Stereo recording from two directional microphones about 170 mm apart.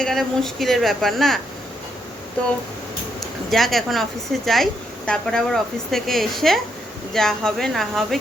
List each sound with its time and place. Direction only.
0.0 s speech: centre (ahead or behind)
3.5 s speech: centre (ahead or behind)